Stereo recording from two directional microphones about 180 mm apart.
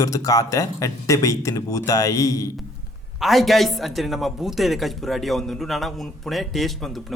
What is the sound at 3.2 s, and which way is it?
A man's voice, centre (ahead or behind).